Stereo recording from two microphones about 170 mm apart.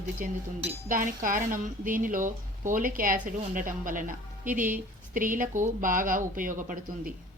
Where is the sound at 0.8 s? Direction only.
55° right (ahead or behind).